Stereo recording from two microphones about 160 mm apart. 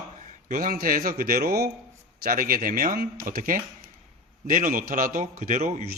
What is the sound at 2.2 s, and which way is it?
A man's voice, 65° right (ahead or behind).